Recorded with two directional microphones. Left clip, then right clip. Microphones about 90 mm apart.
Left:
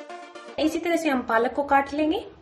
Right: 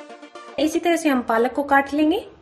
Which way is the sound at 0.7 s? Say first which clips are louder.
Right 7 dB; 40° right (ahead or behind).